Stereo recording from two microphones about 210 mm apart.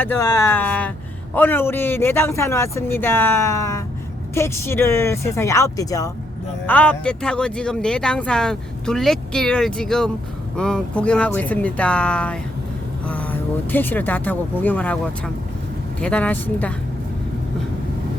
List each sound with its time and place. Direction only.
0.0 s a man's voice: 10° left (ahead or behind)